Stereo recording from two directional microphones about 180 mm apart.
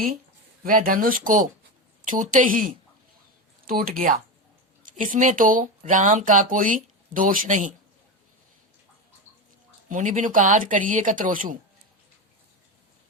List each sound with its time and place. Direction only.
0.6 s speech: 50° right (ahead or behind)
9.9 s speech: 45° right (ahead or behind)